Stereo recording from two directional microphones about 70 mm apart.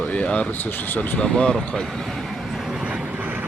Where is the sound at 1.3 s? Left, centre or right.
Centre.